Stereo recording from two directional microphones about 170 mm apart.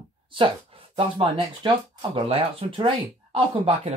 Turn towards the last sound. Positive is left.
turn(degrees=-30)  # may be behind; listen again after turning